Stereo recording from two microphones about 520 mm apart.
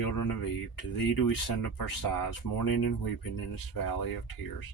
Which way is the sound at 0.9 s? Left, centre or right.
Left.